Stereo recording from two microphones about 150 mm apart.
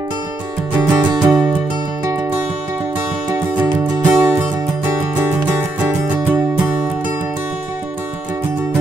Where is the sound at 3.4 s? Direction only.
15° right (ahead or behind).